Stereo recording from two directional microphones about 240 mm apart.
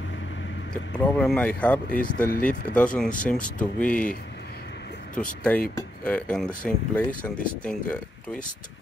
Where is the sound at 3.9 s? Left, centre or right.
Left.